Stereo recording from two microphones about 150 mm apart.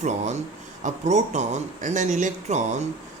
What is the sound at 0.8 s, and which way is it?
Speech, 55° right (ahead or behind).